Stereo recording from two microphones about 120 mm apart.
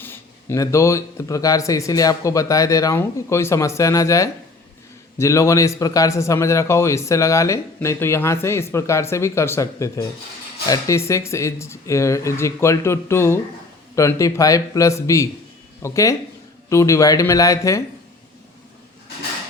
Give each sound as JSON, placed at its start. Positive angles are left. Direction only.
{"t": 0.0, "sound": "a man's voice", "side_deg": 20}